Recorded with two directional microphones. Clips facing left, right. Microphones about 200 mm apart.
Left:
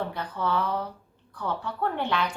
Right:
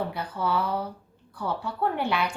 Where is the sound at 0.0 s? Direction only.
10° right (ahead or behind).